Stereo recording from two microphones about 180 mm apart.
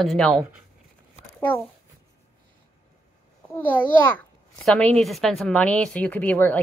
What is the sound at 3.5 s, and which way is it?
A child's voice, 10° left (ahead or behind).